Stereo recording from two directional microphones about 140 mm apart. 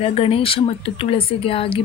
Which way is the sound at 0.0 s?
45° left (ahead or behind).